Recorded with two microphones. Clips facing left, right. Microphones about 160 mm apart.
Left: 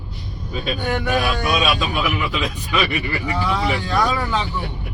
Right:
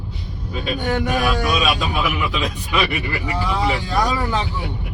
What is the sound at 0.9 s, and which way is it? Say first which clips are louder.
Speech: right 1 dB; 30° right (ahead or behind).